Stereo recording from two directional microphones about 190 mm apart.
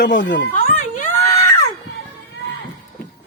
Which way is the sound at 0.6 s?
45° left (ahead or behind).